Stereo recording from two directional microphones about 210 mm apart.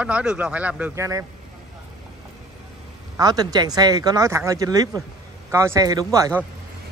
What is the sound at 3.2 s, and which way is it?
Speech, 20° right (ahead or behind).